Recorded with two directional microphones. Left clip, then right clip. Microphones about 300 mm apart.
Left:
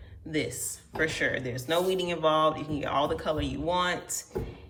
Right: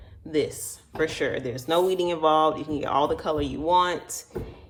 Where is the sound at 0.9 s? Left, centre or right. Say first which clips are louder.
Right 2 dB; centre.